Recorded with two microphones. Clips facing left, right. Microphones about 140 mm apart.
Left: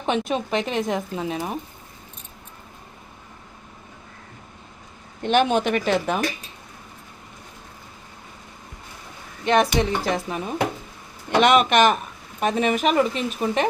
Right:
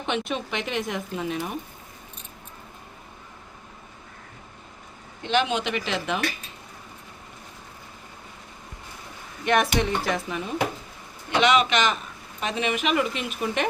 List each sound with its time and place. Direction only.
0.0 s a woman's voice: 40° left (ahead or behind)
5.2 s speech: 50° left (ahead or behind)
9.4 s a woman's voice: 30° left (ahead or behind)
11.3 s a woman's voice: 50° left (ahead or behind); by 13.7 s 35° left (ahead or behind)